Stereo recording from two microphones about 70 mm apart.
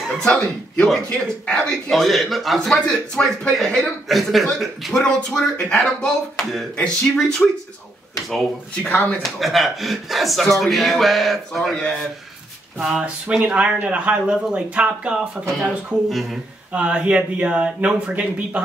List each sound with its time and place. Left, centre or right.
0.2 s speech: centre
8.8 s speech: left
9.2 s speech: centre
12.7 s speech: centre
16.7 s speech: centre